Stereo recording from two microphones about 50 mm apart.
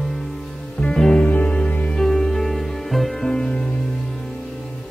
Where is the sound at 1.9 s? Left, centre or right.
Centre.